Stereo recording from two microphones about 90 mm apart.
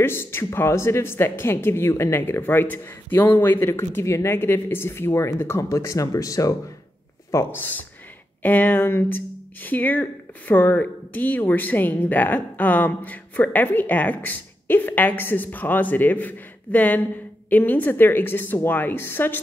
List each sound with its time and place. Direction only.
0.0 s speech: 25° left (ahead or behind)
8.4 s speech: 20° left (ahead or behind)